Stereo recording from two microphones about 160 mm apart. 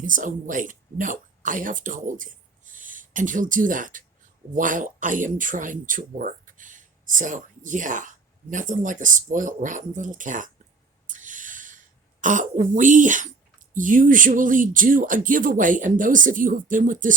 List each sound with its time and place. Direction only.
0.0 s speech: 55° right (ahead or behind)
11.1 s owl: 50° right (ahead or behind)
12.2 s speech: 55° right (ahead or behind)